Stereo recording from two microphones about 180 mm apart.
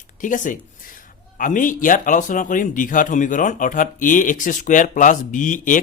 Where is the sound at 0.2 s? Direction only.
45° left (ahead or behind).